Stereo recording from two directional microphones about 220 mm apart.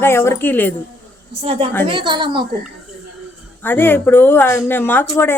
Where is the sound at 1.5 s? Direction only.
25° right (ahead or behind).